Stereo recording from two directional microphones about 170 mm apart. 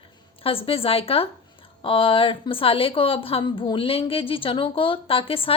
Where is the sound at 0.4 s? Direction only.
35° left (ahead or behind).